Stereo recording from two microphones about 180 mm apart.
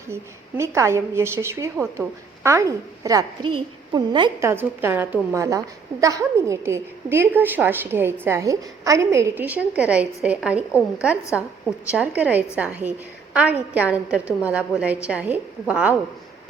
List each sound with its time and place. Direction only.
0.1 s a woman's voice: 15° right (ahead or behind)
4.4 s a woman's voice: 15° right (ahead or behind)